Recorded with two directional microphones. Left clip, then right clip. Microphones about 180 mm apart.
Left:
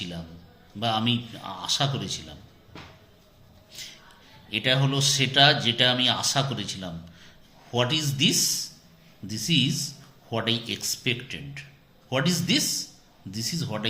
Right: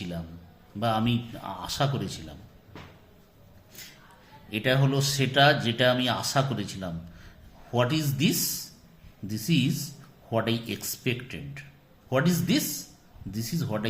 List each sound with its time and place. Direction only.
0.8 s speech: 35° right (ahead or behind)
4.4 s speech: 30° right (ahead or behind)